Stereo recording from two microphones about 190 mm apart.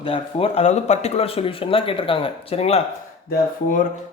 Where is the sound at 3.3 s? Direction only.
45° left (ahead or behind).